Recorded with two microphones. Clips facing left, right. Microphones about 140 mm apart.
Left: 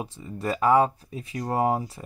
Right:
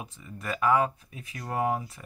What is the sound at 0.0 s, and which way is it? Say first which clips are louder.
Speech: left 8 dB; 30° left (ahead or behind).